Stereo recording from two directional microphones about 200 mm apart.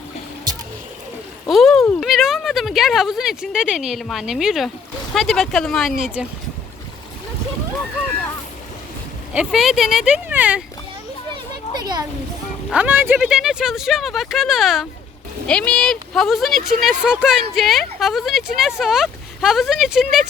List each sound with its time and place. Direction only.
1.5 s speech: centre (ahead or behind)
9.3 s speech: 5° right (ahead or behind)
11.7 s a sound: 20° right (ahead or behind)
12.7 s speech: 10° right (ahead or behind)